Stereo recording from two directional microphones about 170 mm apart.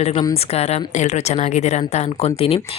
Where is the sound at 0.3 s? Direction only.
40° left (ahead or behind).